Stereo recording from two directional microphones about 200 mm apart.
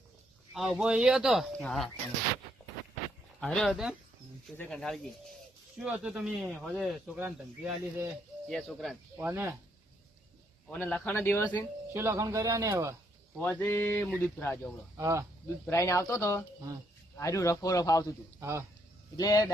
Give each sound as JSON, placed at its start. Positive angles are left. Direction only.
{"t": 0.5, "sound": "speech", "side_deg": 0}
{"t": 3.4, "sound": "speech", "side_deg": 0}
{"t": 9.2, "sound": "speech", "side_deg": -10}
{"t": 10.7, "sound": "speech", "side_deg": 5}
{"t": 11.9, "sound": "speech", "side_deg": -15}
{"t": 13.4, "sound": "speech", "side_deg": 10}
{"t": 14.9, "sound": "speech", "side_deg": -15}
{"t": 15.6, "sound": "speech", "side_deg": 15}
{"t": 18.3, "sound": "speech", "side_deg": -15}
{"t": 19.1, "sound": "speech", "side_deg": 20}